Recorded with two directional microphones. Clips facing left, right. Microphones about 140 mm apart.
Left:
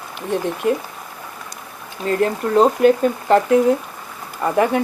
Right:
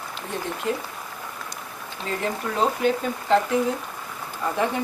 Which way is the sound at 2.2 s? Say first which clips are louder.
Left 9 dB; 55° left (ahead or behind).